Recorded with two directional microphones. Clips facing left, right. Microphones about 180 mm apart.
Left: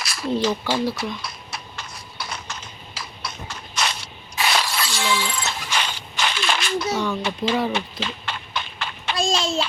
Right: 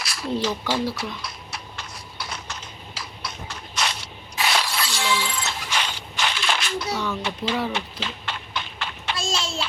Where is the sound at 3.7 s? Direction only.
45° left (ahead or behind).